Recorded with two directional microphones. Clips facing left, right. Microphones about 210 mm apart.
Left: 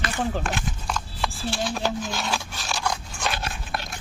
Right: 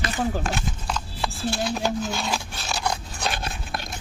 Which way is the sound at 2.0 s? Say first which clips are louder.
Right 2 dB; 10° right (ahead or behind).